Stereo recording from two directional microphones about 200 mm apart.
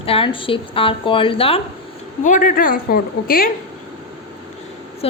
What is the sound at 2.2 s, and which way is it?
A woman's voice, 40° left (ahead or behind).